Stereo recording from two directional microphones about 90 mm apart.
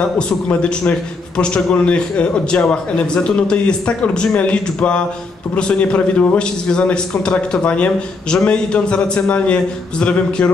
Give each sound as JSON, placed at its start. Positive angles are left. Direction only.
{"t": 0.3, "sound": "a man's voice", "side_deg": 10}